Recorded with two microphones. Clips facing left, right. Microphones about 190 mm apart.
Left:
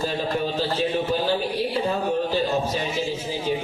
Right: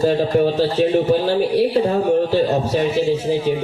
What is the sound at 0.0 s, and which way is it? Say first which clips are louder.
Speech: right 10 dB; 65° right (ahead or behind).